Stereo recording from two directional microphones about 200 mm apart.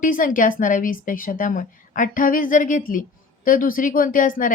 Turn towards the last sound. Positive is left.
turn(degrees=40)  # may be behind; listen again after turning